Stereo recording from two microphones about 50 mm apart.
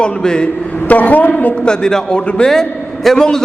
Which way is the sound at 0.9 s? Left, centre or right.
Left.